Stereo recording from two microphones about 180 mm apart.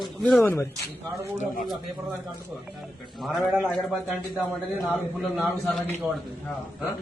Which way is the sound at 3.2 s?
Centre (ahead or behind).